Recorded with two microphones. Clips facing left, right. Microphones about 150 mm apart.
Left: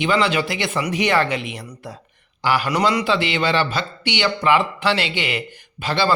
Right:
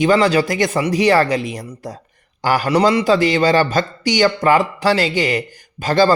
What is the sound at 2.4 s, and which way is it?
Speech, 45° right (ahead or behind).